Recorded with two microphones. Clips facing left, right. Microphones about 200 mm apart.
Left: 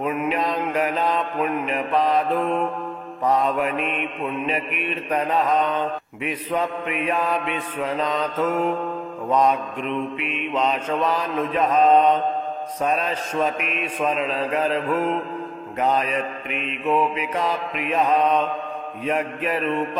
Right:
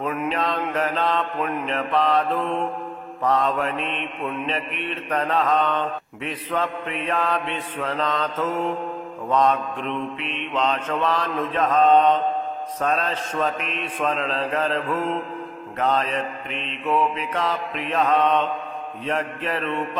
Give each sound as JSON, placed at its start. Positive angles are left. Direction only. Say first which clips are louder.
{"t": 0.0, "sound": "mantra", "louder": "left 2 dB", "side_deg": 10}